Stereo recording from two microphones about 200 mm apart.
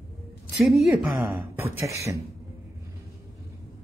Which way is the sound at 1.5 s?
10° right (ahead or behind).